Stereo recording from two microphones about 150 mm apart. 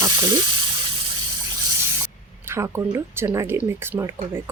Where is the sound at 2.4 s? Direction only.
15° right (ahead or behind).